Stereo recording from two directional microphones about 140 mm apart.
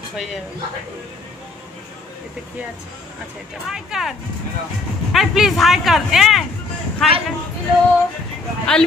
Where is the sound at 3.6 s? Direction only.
Centre (ahead or behind).